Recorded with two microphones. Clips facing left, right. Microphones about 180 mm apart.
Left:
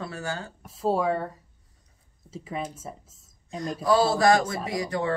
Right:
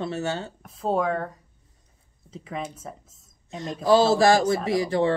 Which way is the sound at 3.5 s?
25° right (ahead or behind).